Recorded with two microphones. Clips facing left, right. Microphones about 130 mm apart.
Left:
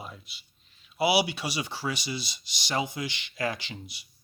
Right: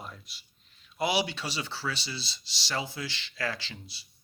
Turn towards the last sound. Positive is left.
turn(degrees=15)  # may be behind; listen again after turning